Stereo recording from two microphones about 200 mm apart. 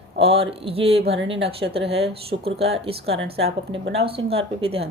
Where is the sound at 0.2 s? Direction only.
30° right (ahead or behind).